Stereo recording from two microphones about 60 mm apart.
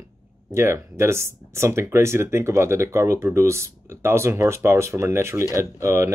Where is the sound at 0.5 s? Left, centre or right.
Right.